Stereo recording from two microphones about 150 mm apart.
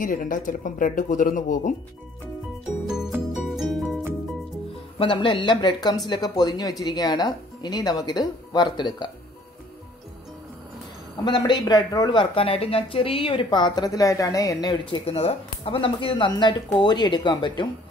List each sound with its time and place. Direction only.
0.0 s speech: 65° left (ahead or behind)
2.9 s music: 5° right (ahead or behind)
4.9 s speech: 35° left (ahead or behind)
11.2 s speech: 30° left (ahead or behind)
15.0 s speech: 40° left (ahead or behind)